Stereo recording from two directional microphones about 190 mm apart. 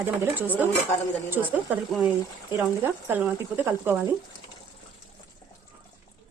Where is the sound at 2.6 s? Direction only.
10° right (ahead or behind).